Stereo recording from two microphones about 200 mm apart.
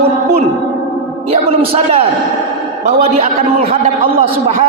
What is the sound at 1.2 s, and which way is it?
A man's voice, 30° right (ahead or behind).